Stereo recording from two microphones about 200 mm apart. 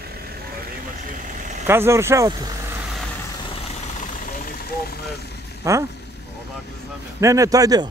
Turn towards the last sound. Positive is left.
turn(degrees=-20)  # may be behind; listen again after turning